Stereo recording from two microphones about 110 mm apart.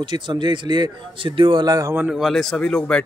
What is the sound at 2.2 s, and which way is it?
Speech, 5° left (ahead or behind).